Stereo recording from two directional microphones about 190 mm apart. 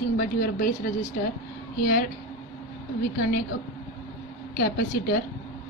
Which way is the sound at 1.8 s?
50° left (ahead or behind).